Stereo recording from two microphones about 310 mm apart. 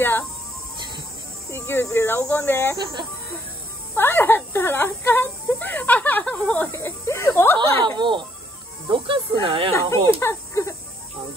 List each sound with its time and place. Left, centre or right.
1.5 s speech: centre
2.8 s speech: centre
3.9 s speech: centre
7.8 s speech: centre
9.8 s speech: centre